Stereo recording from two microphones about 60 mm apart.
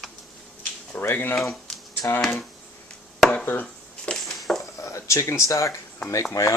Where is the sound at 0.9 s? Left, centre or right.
Left.